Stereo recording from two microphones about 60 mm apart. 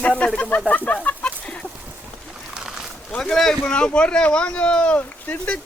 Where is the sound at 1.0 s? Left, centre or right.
Centre.